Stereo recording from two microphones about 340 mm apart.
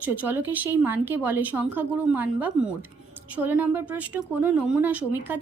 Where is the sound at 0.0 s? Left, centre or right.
Centre.